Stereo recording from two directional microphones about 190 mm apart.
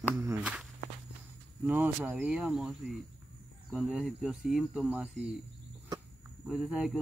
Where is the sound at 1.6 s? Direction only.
10° right (ahead or behind).